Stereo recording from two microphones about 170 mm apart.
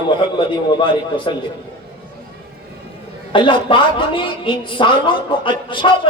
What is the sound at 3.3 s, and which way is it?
A woman's voice, 30° left (ahead or behind).